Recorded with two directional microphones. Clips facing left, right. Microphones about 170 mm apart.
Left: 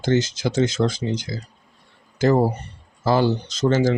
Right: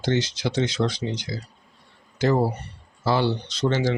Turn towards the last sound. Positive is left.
turn(degrees=45)  # may be behind; listen again after turning